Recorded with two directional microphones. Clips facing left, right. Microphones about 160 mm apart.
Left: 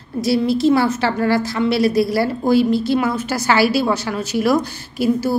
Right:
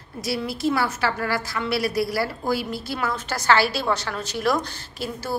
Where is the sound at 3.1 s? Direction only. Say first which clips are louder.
Left 3 dB; 10° left (ahead or behind).